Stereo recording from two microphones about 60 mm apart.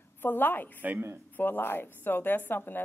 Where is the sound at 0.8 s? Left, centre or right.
Right.